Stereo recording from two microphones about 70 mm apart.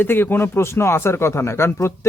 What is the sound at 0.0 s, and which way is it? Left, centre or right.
Speech, left.